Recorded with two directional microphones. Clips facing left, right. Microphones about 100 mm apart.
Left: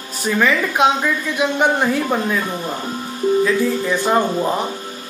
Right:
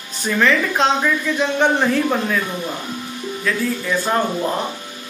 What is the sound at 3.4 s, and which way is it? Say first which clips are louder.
Speech: left 4 dB; 20° left (ahead or behind).